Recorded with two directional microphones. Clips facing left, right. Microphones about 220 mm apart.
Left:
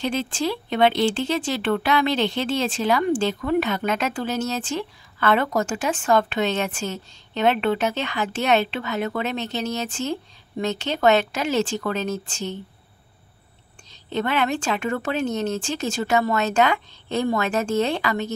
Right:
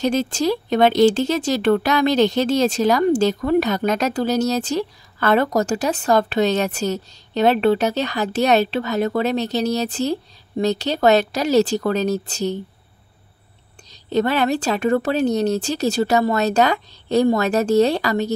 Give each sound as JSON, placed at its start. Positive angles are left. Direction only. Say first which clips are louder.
{"t": 0.0, "sound": "speech", "louder": "right 5 dB", "side_deg": -40}
{"t": 13.8, "sound": "speech", "louder": "right 6 dB", "side_deg": -40}